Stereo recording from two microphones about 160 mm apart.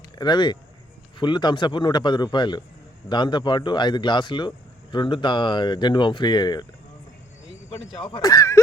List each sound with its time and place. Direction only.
0.2 s speech: 25° left (ahead or behind)
7.7 s speech: 35° left (ahead or behind)